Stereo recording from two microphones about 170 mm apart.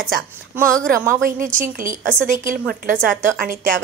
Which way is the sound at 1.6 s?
50° right (ahead or behind).